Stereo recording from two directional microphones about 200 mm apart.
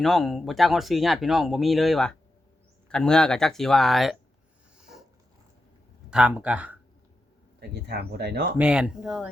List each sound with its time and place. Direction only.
0.0 s speech: centre (ahead or behind)
4.8 s a sound: 5° right (ahead or behind)
6.1 s speech: 5° right (ahead or behind)
7.6 s speech: 55° right (ahead or behind)
8.5 s speech: 5° right (ahead or behind)